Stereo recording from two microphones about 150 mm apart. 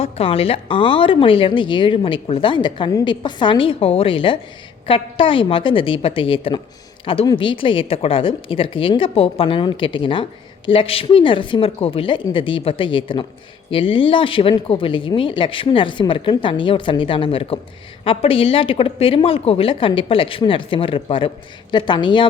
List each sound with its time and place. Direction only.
0.0 s a woman's voice: 40° left (ahead or behind)